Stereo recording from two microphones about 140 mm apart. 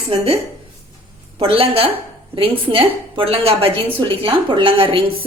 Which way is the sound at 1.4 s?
45° right (ahead or behind).